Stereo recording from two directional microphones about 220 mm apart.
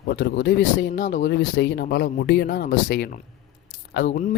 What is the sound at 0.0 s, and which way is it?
Speech, 50° left (ahead or behind).